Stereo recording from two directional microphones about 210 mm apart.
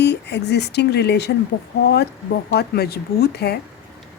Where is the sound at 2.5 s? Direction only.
50° left (ahead or behind).